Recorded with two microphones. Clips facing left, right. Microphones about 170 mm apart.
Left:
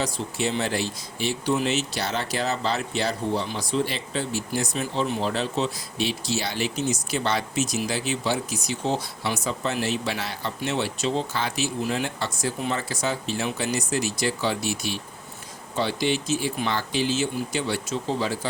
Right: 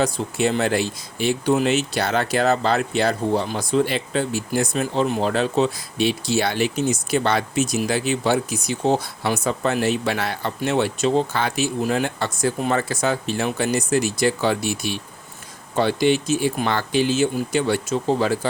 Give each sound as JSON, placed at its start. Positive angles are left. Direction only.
{"t": 0.0, "sound": "speech", "side_deg": -55}